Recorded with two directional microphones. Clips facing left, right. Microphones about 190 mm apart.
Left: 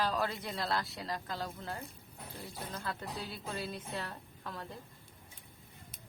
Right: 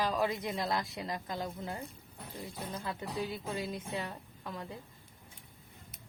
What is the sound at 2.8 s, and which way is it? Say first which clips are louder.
A woman's voice: right 4 dB; 15° right (ahead or behind).